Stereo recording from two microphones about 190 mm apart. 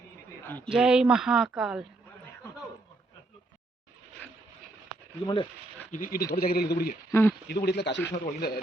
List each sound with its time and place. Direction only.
0.4 s speech: 10° left (ahead or behind)
0.7 s speech: 5° right (ahead or behind)
4.2 s vehicle: 10° left (ahead or behind)
5.2 s speech: 25° left (ahead or behind)
5.9 s speech: 45° left (ahead or behind)
7.1 s speech: 10° left (ahead or behind)
7.4 s speech: 55° left (ahead or behind)
8.1 s speech: 50° left (ahead or behind)